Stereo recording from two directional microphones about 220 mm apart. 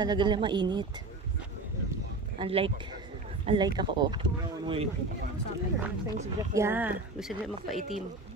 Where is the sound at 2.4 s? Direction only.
25° right (ahead or behind).